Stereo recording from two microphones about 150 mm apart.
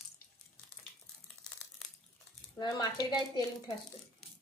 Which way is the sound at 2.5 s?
30° left (ahead or behind).